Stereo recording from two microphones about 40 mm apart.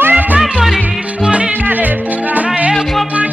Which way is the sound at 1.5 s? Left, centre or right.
Right.